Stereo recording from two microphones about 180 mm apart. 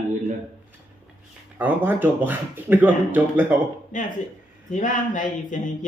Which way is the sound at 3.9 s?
45° left (ahead or behind).